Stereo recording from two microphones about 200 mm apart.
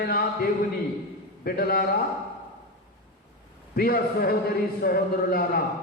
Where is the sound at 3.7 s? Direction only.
50° left (ahead or behind).